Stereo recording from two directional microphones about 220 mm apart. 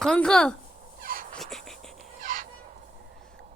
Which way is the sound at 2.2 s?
40° right (ahead or behind).